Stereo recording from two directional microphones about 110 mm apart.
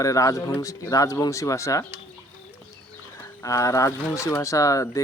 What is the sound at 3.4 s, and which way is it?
Speech, 30° left (ahead or behind).